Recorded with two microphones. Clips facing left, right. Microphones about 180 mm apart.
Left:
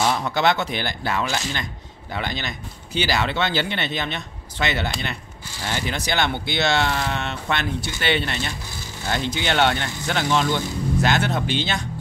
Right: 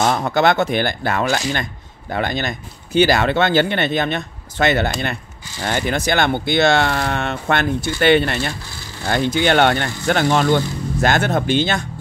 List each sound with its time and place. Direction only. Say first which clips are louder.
0.0 s speech: right 4 dB; 50° right (ahead or behind)